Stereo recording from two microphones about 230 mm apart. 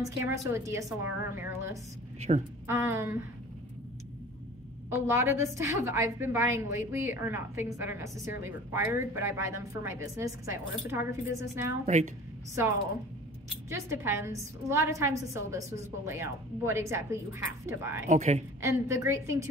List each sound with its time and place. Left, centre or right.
0.0 s a woman's voice: centre
2.1 s a woman's voice: right
2.6 s a woman's voice: centre
4.9 s a woman's voice: centre
11.8 s speech: right
13.7 s a woman's voice: centre
18.0 s speech: right
18.6 s a woman's voice: centre